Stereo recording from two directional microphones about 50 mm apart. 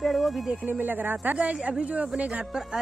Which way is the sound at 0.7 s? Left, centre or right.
Right.